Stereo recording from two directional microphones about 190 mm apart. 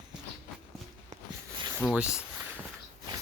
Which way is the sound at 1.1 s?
40° right (ahead or behind).